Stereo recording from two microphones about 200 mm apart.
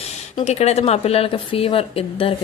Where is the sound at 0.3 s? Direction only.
30° left (ahead or behind).